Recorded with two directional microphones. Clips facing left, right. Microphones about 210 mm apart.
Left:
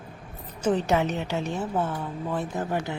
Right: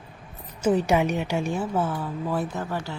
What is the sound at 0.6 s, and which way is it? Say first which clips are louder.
A woman's voice: right 2 dB; 10° right (ahead or behind).